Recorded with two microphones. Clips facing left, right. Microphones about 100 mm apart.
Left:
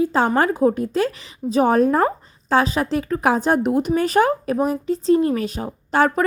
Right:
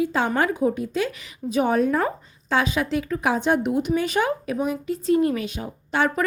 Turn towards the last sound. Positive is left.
turn(degrees=40)  # may be behind; listen again after turning